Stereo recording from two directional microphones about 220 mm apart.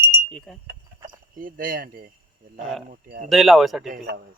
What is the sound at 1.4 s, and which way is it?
Speech, 40° right (ahead or behind).